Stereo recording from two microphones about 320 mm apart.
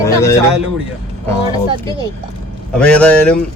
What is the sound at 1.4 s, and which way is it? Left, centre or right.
Speech, centre.